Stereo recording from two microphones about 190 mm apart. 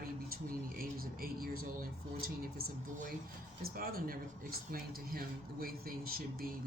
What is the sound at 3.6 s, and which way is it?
Speech, 50° right (ahead or behind).